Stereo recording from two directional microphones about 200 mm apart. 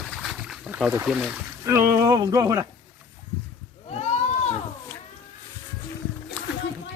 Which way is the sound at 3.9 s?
35° left (ahead or behind).